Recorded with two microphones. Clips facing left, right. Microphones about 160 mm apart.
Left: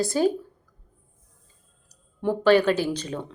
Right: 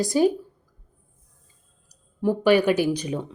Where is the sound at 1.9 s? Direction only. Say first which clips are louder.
Right 2 dB; 10° right (ahead or behind).